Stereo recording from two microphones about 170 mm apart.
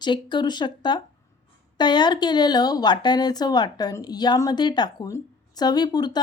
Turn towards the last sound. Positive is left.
turn(degrees=25)  # may be behind; listen again after turning